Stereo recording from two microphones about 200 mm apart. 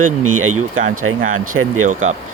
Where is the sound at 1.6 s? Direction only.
75° right (ahead or behind).